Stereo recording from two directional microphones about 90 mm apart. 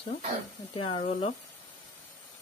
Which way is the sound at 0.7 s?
90° left.